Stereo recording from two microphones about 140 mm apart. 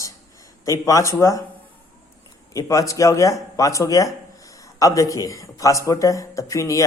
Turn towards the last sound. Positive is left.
turn(degrees=25)  # may be behind; listen again after turning